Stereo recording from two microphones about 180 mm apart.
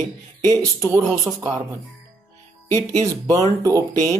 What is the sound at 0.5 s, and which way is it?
Speech, 20° right (ahead or behind).